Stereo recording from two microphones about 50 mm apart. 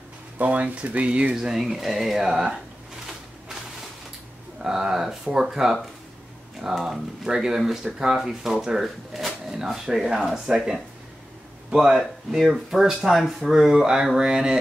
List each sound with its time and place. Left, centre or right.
0.4 s speech: right
1.3 s speech: centre
4.6 s speech: centre